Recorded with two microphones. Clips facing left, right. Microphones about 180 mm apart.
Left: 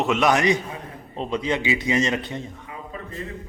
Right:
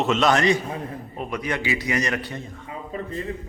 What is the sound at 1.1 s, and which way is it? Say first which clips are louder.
A man's voice: left 4 dB; 25° left (ahead or behind).